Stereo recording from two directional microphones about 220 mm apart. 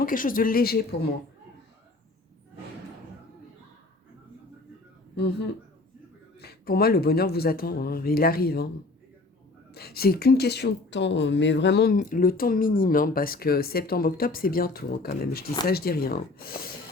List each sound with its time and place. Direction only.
0.0 s speech: 40° left (ahead or behind)
6.4 s speech: 45° left (ahead or behind)
9.7 s speech: 45° left (ahead or behind)
11.9 s speech: 40° left (ahead or behind)